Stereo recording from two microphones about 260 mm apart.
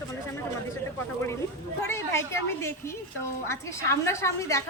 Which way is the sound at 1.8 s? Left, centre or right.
Centre.